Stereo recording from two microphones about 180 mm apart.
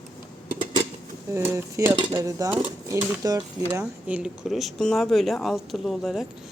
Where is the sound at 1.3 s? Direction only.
15° right (ahead or behind).